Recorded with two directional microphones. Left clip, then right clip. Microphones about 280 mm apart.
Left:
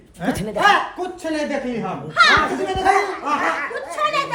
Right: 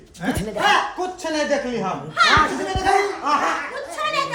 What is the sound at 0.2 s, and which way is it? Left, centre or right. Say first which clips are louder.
Speech: left 3 dB; centre.